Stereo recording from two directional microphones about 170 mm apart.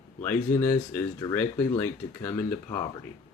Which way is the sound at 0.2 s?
15° left (ahead or behind).